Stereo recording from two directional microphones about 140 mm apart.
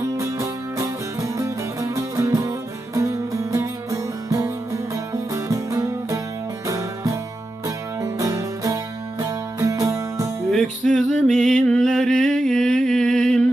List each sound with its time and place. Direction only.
0.0 s music: 20° right (ahead or behind)
10.5 s music: 5° left (ahead or behind)